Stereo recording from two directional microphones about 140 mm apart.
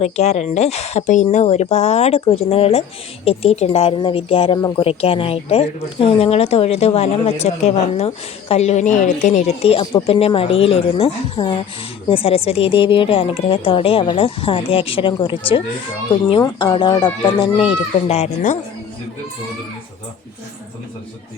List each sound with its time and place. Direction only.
0.0 s a woman's voice: 50° left (ahead or behind)